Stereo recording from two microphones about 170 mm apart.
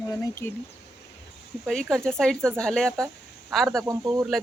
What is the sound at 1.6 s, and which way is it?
Speech, 5° left (ahead or behind).